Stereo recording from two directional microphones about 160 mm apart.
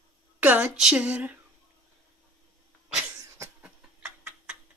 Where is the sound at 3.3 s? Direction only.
15° right (ahead or behind).